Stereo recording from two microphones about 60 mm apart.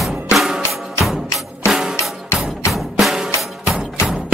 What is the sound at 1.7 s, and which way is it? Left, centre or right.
Drum, centre.